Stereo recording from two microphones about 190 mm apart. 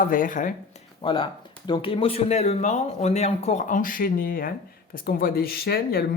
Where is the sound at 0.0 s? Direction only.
45° left (ahead or behind).